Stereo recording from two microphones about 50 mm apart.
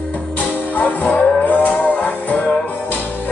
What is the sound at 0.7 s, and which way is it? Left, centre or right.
Music, left.